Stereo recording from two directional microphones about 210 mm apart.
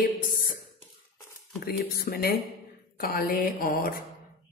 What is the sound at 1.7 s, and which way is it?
A woman's voice, 45° left (ahead or behind).